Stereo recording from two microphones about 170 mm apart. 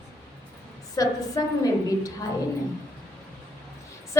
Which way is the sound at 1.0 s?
20° left (ahead or behind).